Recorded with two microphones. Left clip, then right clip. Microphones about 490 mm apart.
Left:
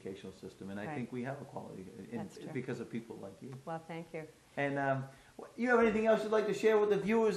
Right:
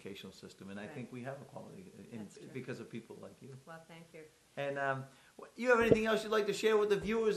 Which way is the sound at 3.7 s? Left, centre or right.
Left.